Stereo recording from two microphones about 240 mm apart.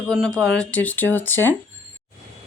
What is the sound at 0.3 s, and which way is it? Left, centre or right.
Speech, centre.